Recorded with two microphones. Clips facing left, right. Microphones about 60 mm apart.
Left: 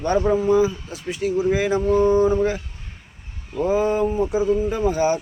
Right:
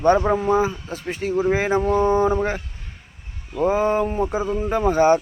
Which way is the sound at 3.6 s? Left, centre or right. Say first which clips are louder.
Even; right.